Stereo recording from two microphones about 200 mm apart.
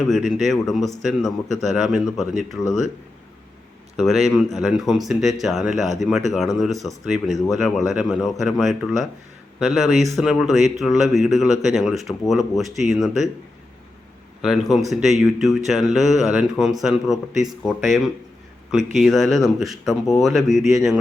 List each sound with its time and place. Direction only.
0.0 s speech: centre (ahead or behind)
3.9 s speech: centre (ahead or behind)
14.4 s speech: centre (ahead or behind)